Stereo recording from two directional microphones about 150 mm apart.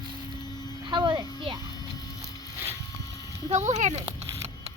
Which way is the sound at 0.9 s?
30° right (ahead or behind).